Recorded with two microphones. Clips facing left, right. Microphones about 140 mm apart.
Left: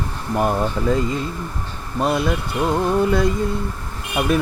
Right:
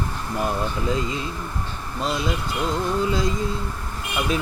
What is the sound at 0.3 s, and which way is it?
Speech, 50° left (ahead or behind).